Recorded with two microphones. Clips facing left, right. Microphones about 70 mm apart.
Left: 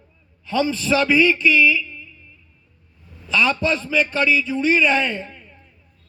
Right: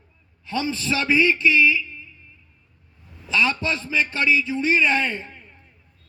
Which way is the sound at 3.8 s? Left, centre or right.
Right.